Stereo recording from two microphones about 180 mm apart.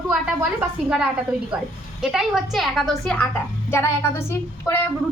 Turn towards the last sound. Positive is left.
turn(degrees=15)  # may be behind; listen again after turning